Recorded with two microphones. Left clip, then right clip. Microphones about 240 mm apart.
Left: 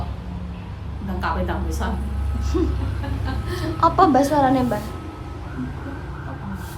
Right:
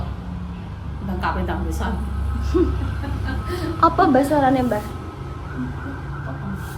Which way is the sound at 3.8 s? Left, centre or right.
Centre.